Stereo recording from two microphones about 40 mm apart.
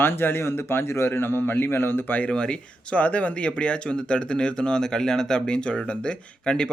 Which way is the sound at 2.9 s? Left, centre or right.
Left.